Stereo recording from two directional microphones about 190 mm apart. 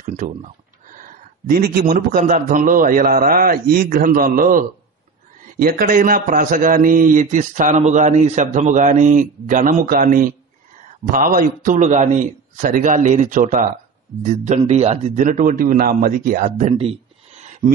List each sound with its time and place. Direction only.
0.0 s a man's voice: 45° right (ahead or behind)